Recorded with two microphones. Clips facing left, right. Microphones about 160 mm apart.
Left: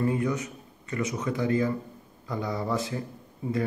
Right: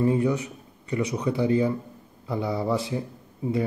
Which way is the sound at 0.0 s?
20° right (ahead or behind).